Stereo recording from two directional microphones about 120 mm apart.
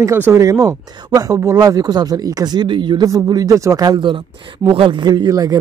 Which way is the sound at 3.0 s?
30° right (ahead or behind).